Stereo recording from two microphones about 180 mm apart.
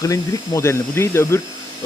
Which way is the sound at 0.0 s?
15° left (ahead or behind).